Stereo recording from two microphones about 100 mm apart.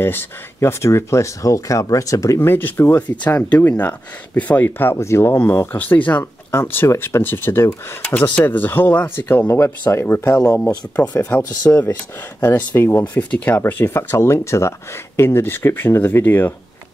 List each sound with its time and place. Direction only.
0.0 s speech: 20° left (ahead or behind)